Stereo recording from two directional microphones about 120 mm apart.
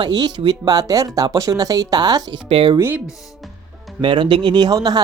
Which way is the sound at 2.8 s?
20° right (ahead or behind).